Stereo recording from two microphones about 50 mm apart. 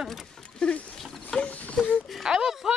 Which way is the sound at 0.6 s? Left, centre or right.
Left.